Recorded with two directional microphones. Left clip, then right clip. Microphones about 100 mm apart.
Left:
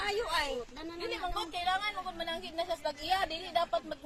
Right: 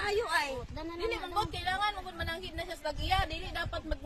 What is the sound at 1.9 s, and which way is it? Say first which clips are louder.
Speech: even; 40° right (ahead or behind).